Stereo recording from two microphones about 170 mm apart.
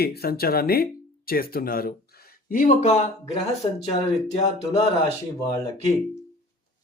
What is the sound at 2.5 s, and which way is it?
Speech, 50° left (ahead or behind).